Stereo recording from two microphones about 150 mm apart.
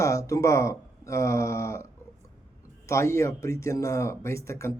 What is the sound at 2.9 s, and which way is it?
Speech, 20° left (ahead or behind).